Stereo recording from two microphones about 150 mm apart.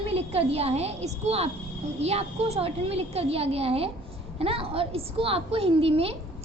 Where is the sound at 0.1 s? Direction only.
40° right (ahead or behind).